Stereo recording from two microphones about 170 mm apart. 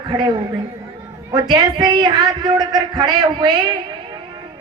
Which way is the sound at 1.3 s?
25° right (ahead or behind).